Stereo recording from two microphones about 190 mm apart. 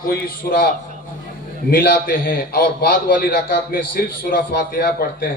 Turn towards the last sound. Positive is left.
turn(degrees=55)  # may be behind; listen again after turning